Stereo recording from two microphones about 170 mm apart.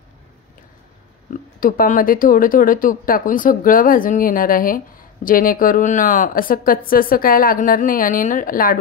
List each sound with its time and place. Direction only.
1.3 s speech: 55° left (ahead or behind)